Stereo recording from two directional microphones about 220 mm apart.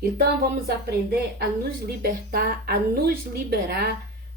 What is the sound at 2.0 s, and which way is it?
A woman's voice, 45° right (ahead or behind).